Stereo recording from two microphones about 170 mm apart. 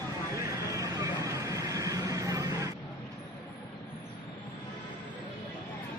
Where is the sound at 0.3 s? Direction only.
20° right (ahead or behind).